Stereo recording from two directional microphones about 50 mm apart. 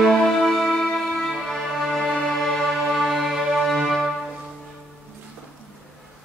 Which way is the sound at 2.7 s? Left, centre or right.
Centre.